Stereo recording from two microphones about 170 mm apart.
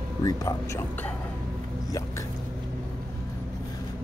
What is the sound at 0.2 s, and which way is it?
Speech, 20° left (ahead or behind).